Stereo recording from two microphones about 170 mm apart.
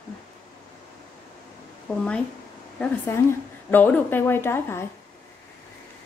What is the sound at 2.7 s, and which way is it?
A woman's voice, 10° left (ahead or behind).